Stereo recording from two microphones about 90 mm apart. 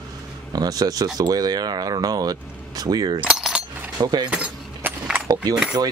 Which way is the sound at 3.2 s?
5° right (ahead or behind).